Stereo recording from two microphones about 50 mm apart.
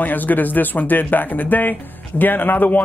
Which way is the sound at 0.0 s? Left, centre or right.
Left.